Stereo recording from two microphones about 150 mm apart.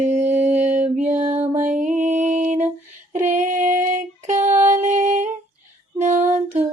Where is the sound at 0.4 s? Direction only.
50° right (ahead or behind).